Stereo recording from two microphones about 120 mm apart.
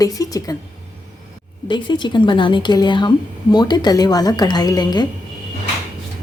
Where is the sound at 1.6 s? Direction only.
40° left (ahead or behind).